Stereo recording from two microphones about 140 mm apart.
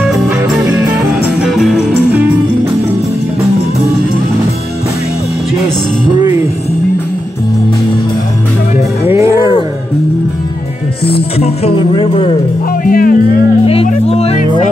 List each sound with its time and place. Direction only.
0.7 s music: 5° right (ahead or behind)
6.1 s music: 30° right (ahead or behind)
9.0 s music: 20° right (ahead or behind)
11.3 s a sound: 45° left (ahead or behind)
12.8 s music: 90° left
14.0 s music: 45° left (ahead or behind)